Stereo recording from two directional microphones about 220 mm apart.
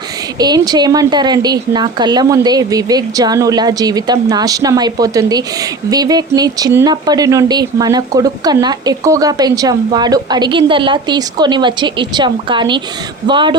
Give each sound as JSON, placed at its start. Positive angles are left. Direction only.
{"t": 0.3, "sound": "a woman's voice", "side_deg": -15}